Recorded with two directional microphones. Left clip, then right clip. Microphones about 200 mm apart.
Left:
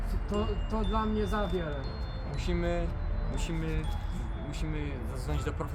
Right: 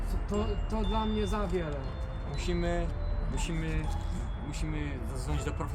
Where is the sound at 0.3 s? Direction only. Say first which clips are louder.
Left 1 dB; 15° right (ahead or behind).